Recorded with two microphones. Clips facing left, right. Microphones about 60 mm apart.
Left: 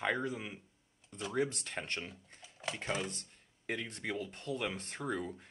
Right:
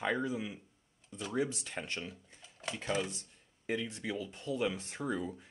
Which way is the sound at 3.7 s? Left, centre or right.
Left.